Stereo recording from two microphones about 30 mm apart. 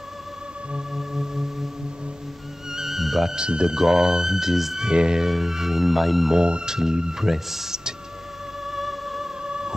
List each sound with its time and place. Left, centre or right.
0.7 s music: centre
2.7 s music: centre
3.3 s speech: right
3.7 s speech: centre
4.8 s speech: right
5.3 s speech: centre
6.3 s speech: right
8.6 s music: centre
9.4 s music: right